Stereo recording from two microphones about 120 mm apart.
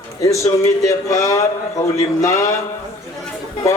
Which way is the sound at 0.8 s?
25° left (ahead or behind).